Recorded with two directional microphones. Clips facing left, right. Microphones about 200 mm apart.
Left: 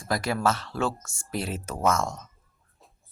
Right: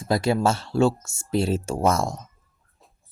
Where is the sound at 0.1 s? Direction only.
25° right (ahead or behind).